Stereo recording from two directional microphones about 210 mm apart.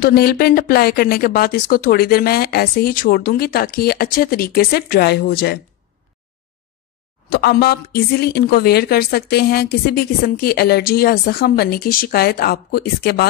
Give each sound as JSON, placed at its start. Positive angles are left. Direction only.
{"t": 0.0, "sound": "speech", "side_deg": 45}
{"t": 7.2, "sound": "speech", "side_deg": 50}